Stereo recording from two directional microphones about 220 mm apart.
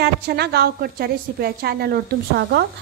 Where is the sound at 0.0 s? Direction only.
45° right (ahead or behind).